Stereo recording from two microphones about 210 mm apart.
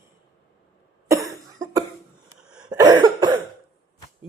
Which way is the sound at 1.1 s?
15° right (ahead or behind).